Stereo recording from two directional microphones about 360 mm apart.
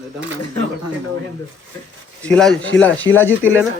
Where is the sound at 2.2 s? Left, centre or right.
Centre.